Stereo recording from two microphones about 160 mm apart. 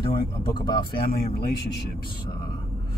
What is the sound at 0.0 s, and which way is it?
Speech, 25° left (ahead or behind).